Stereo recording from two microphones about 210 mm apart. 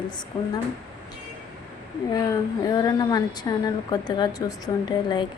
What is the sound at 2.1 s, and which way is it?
A woman's voice, 15° left (ahead or behind).